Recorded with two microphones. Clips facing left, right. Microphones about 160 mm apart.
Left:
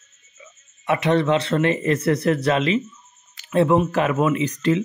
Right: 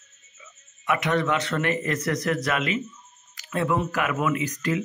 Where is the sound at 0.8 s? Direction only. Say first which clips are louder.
Left 5 dB; 30° left (ahead or behind).